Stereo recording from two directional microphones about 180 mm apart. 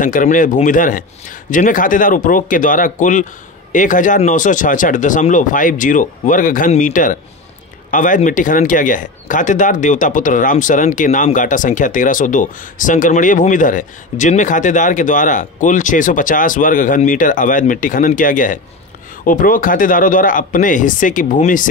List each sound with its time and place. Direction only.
0.0 s speech: 45° left (ahead or behind)